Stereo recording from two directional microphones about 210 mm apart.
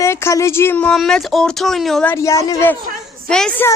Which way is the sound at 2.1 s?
15° left (ahead or behind).